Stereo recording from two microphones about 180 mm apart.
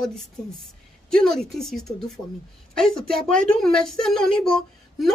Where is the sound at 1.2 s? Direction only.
5° left (ahead or behind).